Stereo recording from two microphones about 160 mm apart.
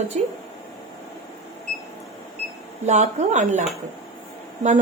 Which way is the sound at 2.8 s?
45° right (ahead or behind).